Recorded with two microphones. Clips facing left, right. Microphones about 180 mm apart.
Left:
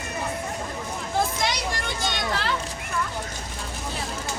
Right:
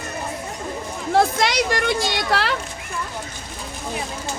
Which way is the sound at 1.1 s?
75° right (ahead or behind).